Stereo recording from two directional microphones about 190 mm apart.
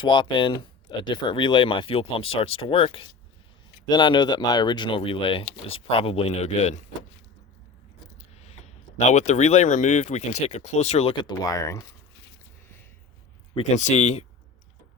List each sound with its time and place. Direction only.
0.0 s speech: 25° left (ahead or behind)
9.0 s speech: 40° left (ahead or behind); by 11.9 s 15° left (ahead or behind)
13.7 s speech: 35° left (ahead or behind)